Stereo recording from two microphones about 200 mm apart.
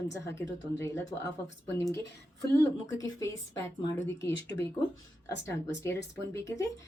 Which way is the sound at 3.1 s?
15° left (ahead or behind).